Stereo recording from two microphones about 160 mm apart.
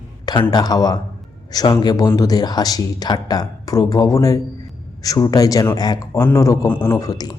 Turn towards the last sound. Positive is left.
turn(degrees=25)  # may be behind; listen again after turning